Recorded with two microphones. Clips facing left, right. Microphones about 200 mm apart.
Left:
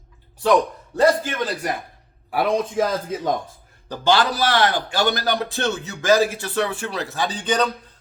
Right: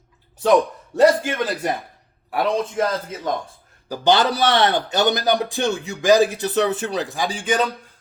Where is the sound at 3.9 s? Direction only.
20° right (ahead or behind).